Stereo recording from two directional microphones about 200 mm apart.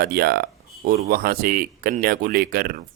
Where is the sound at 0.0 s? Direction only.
50° right (ahead or behind).